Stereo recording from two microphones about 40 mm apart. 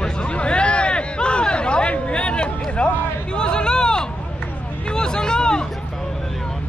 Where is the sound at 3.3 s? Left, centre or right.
Left.